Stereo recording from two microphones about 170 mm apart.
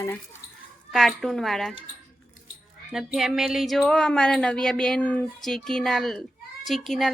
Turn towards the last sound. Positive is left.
turn(degrees=0)  # may be behind; listen again after turning